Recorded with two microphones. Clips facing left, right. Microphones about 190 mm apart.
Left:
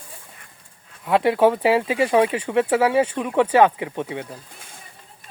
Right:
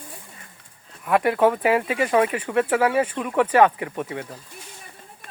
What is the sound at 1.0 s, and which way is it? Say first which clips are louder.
Speech: left 2 dB; 15° left (ahead or behind).